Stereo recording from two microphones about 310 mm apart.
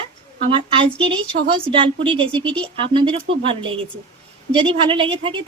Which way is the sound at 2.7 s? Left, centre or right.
Centre.